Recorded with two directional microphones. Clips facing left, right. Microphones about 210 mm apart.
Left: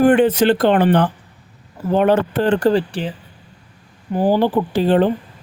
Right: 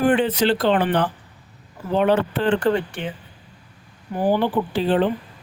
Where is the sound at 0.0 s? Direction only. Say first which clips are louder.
Left 6 dB; 50° left (ahead or behind).